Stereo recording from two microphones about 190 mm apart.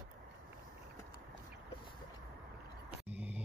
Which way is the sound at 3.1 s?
10° right (ahead or behind).